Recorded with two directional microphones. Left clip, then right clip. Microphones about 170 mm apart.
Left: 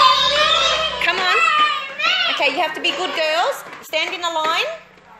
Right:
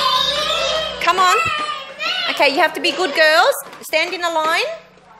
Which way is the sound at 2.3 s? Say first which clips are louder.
Right 4 dB; 55° right (ahead or behind).